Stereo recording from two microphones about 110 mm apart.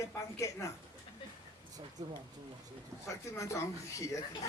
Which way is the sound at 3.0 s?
25° left (ahead or behind).